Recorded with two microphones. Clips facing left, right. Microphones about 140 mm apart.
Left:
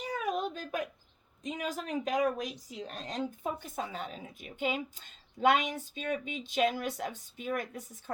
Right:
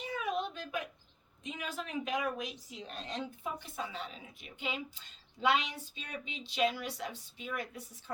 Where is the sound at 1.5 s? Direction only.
40° left (ahead or behind).